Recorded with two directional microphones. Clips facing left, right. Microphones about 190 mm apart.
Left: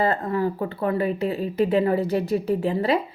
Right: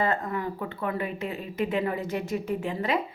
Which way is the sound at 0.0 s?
35° left (ahead or behind).